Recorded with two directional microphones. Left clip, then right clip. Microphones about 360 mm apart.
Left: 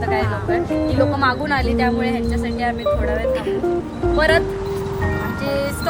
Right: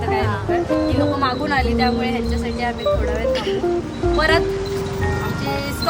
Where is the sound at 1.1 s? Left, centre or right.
Centre.